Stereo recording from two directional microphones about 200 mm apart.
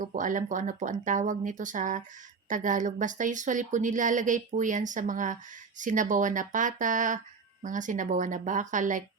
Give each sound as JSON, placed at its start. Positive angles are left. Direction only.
{"t": 0.0, "sound": "speech", "side_deg": -40}